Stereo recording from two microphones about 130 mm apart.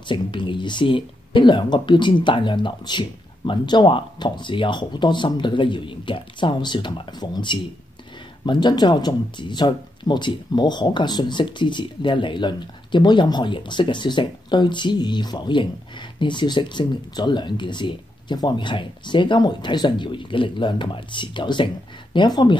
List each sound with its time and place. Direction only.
0.0 s speech: 40° left (ahead or behind)